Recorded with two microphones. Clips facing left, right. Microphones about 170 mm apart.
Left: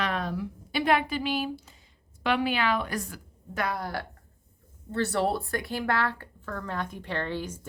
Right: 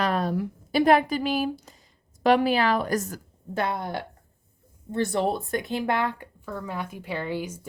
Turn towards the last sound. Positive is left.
turn(degrees=-10)  # may be behind; listen again after turning